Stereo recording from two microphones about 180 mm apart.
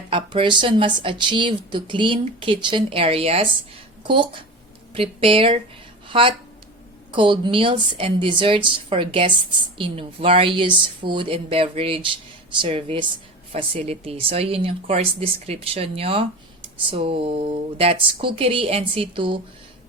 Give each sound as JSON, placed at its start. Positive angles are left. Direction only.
{"t": 0.1, "sound": "a woman's voice", "side_deg": -30}